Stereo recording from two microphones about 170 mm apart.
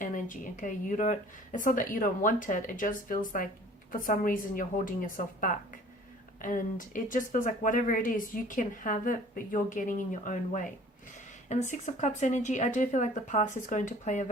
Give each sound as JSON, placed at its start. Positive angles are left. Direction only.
{"t": 0.0, "sound": "speech", "side_deg": 50}